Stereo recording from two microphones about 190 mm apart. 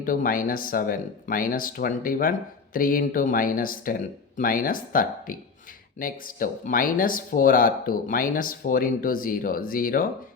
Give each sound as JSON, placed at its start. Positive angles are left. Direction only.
{"t": 0.0, "sound": "speech", "side_deg": 45}